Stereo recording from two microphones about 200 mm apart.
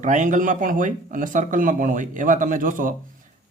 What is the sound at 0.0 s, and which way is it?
Speech, 40° right (ahead or behind).